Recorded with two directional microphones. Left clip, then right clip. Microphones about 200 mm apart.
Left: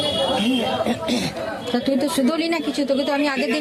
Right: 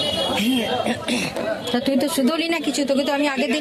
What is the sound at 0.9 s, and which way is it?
Speech, centre (ahead or behind).